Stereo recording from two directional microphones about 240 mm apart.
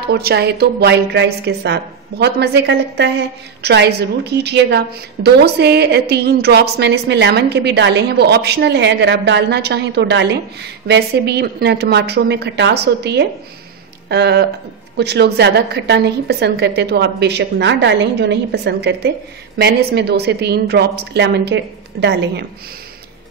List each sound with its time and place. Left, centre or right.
0.0 s a woman's voice: right